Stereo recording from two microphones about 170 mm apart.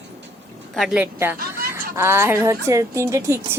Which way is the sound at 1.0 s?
10° right (ahead or behind).